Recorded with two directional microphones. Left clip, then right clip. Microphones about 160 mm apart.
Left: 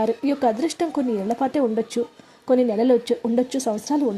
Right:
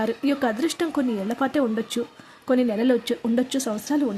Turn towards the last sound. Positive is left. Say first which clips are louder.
# left 2 dB
turn(degrees=5)  # may be behind; listen again after turning